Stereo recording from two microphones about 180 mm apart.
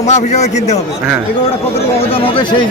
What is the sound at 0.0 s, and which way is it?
Speech, 40° left (ahead or behind).